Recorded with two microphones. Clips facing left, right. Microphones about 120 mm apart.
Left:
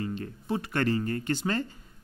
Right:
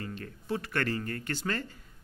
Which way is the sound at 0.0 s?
20° left (ahead or behind).